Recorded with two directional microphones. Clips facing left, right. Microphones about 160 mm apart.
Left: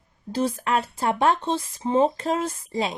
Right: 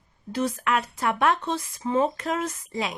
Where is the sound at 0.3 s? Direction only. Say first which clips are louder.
Left 1 dB; 30° left (ahead or behind).